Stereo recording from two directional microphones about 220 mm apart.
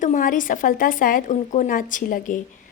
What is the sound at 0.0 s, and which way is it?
Speech, 35° left (ahead or behind).